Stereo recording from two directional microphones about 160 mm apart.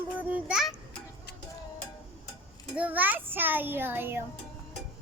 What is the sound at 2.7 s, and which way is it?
A child's voice, 10° right (ahead or behind).